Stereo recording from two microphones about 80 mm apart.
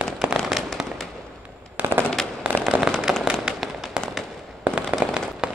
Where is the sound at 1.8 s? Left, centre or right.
Right.